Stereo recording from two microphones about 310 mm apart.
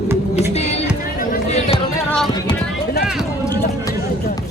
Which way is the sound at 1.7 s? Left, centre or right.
Centre.